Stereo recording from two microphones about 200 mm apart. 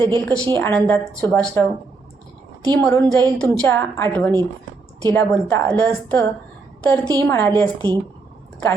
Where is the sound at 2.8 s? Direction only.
15° left (ahead or behind).